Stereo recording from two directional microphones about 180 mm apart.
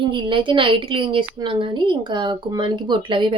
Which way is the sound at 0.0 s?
25° right (ahead or behind).